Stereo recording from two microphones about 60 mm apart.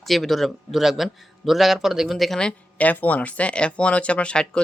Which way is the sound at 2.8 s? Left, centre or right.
Left.